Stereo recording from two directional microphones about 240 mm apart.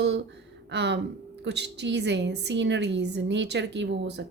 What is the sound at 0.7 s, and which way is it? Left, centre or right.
A woman's voice, right.